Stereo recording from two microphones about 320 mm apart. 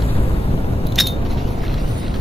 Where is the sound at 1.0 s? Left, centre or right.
Centre.